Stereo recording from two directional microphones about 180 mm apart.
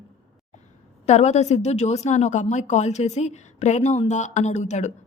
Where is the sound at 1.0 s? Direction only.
40° left (ahead or behind).